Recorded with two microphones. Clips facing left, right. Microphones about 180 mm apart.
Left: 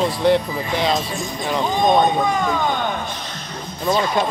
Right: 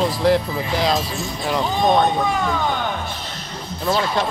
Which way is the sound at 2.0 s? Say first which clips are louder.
Left 1 dB; 10° left (ahead or behind).